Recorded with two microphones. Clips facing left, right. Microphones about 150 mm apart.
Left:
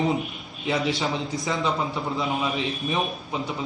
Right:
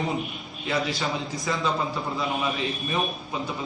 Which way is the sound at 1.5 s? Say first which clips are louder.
Even; 20° left (ahead or behind).